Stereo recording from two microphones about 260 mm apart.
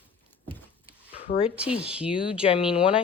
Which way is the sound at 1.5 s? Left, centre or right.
Centre.